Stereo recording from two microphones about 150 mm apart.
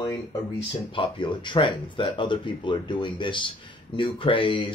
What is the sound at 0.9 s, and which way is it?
Speech, 35° left (ahead or behind).